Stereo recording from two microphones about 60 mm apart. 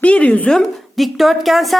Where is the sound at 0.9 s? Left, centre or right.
Centre.